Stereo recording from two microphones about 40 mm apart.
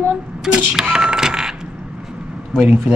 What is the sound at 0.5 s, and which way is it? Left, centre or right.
Cash register, right.